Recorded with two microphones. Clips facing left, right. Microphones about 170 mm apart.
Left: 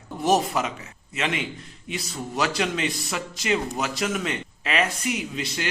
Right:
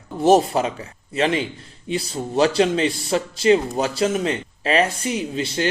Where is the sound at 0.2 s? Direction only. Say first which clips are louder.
Right 6 dB; 30° right (ahead or behind).